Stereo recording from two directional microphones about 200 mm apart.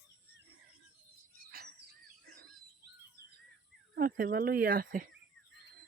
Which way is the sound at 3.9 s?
45° right (ahead or behind).